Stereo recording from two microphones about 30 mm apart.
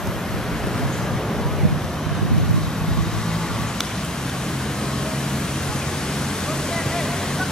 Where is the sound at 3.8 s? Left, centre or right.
Centre.